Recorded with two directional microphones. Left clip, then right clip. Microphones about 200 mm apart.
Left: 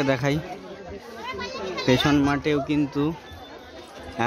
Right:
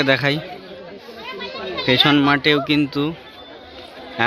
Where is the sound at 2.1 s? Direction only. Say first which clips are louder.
Right 7 dB; 5° right (ahead or behind).